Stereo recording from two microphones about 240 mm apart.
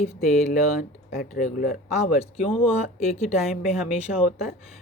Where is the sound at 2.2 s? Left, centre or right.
Left.